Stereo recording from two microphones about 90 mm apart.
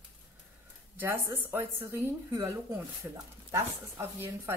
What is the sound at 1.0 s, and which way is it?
A woman's voice, 25° right (ahead or behind).